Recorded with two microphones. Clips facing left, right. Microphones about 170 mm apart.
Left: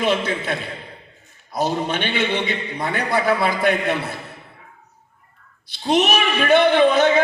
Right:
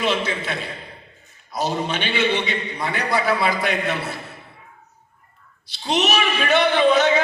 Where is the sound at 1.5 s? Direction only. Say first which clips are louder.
Left 2 dB; 50° left (ahead or behind).